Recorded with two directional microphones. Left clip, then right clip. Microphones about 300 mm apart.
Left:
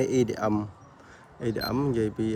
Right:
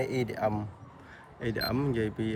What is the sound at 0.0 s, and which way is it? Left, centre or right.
Speech, left.